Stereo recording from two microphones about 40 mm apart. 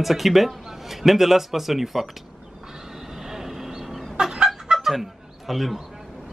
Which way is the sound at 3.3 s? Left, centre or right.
Centre.